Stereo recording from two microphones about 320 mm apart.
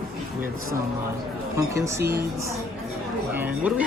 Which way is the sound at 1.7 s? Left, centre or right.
Centre.